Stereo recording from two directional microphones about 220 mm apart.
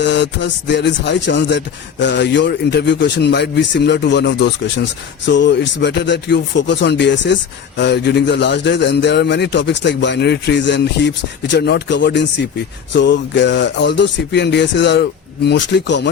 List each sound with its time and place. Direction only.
0.0 s a man's voice: 50° left (ahead or behind)